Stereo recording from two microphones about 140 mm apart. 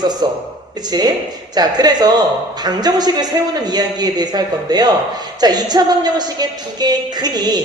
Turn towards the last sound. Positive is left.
turn(degrees=-30)  # may be behind; listen again after turning